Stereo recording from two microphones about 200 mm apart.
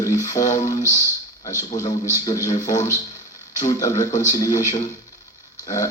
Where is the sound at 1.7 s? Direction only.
35° left (ahead or behind).